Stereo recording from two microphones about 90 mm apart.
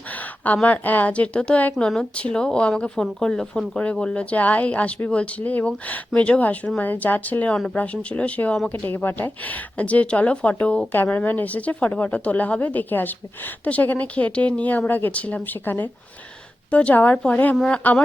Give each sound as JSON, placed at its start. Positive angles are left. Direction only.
{"t": 0.4, "sound": "a woman's voice", "side_deg": 15}